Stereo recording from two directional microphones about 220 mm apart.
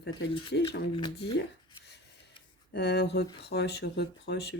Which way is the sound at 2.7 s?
50° left (ahead or behind).